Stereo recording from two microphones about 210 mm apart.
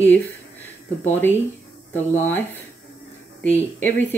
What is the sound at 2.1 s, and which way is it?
Speech, 10° left (ahead or behind).